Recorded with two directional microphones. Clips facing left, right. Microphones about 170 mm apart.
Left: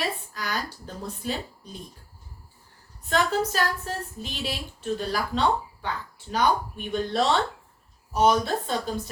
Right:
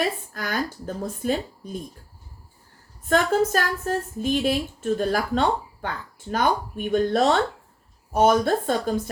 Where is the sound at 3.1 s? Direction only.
50° right (ahead or behind).